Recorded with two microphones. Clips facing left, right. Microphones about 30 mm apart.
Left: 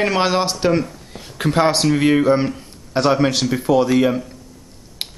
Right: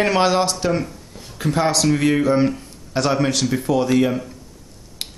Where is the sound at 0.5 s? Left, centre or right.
Left.